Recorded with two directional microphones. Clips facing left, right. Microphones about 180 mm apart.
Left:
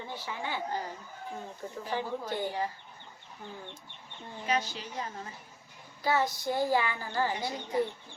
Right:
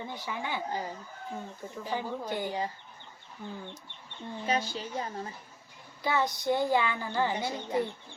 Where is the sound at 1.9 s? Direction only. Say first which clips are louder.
Even; 15° right (ahead or behind).